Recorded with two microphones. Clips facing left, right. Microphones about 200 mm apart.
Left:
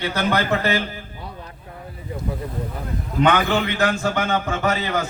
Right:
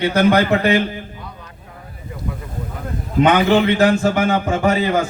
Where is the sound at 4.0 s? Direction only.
15° right (ahead or behind).